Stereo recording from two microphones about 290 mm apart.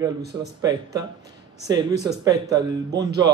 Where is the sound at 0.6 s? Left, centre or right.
Centre.